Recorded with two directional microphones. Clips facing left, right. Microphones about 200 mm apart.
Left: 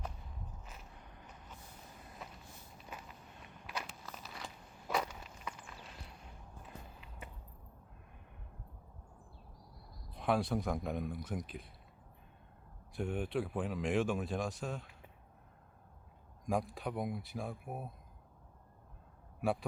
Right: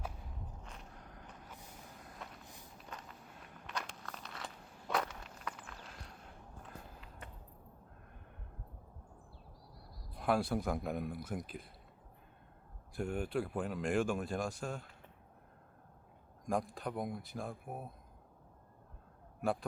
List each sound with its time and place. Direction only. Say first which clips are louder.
0.6 s a sound: right 2 dB; 5° left (ahead or behind)
2.4 s walk: right 1 dB; 15° right (ahead or behind)
2.7 s a sound: left 1 dB; 10° left (ahead or behind)
3.7 s walk: even; 5° left (ahead or behind)
6.6 s a sound: even; 5° left (ahead or behind)
10.2 s speech: even; centre (ahead or behind)
13.0 s speech: even; centre (ahead or behind)
16.5 s speech: left 1 dB; 5° left (ahead or behind)
19.4 s a man's voice: left 1 dB; 5° left (ahead or behind)